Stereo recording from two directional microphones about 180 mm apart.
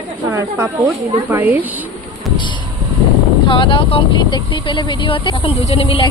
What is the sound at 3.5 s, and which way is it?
Speech, 30° left (ahead or behind).